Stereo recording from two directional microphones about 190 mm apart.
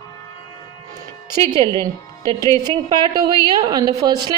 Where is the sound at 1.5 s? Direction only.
20° right (ahead or behind).